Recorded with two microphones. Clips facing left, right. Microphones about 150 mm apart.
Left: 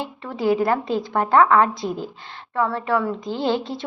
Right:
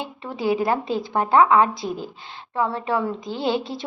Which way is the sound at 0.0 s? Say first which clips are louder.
Left 2 dB; 20° right (ahead or behind).